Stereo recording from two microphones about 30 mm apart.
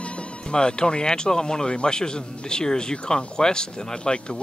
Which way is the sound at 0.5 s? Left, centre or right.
Left.